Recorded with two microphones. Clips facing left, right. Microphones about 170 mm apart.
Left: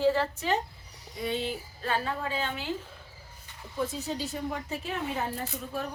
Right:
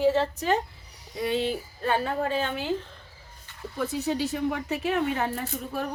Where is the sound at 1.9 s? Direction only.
55° right (ahead or behind).